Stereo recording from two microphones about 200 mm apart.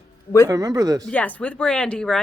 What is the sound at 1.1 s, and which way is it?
Speech, 5° left (ahead or behind).